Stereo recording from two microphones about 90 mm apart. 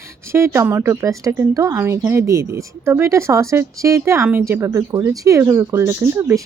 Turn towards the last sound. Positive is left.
turn(degrees=-35)  # may be behind; listen again after turning